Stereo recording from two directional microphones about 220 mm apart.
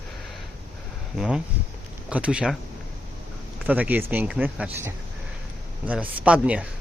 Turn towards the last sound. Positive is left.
turn(degrees=-5)  # may be behind; listen again after turning